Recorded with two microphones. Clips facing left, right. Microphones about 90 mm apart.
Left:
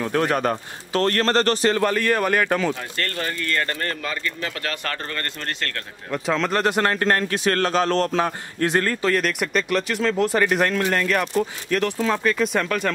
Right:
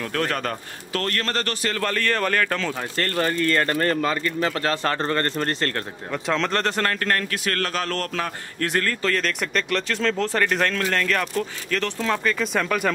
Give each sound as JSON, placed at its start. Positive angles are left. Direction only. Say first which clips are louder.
{"t": 0.0, "sound": "speech", "louder": "left 4 dB", "side_deg": 20}
{"t": 1.1, "sound": "speech", "louder": "left 7 dB", "side_deg": 30}
{"t": 1.8, "sound": "speech", "louder": "left 3 dB", "side_deg": 15}
{"t": 2.8, "sound": "speech", "louder": "right 4 dB", "side_deg": -35}
{"t": 6.0, "sound": "speech", "louder": "left 2 dB", "side_deg": 0}